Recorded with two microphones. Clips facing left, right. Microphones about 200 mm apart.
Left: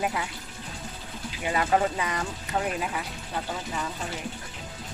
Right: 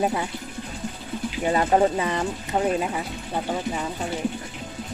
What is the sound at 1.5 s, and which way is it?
Speech, 35° right (ahead or behind).